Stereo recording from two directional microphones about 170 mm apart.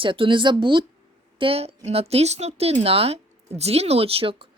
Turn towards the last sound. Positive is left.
turn(degrees=-35)  # may be behind; listen again after turning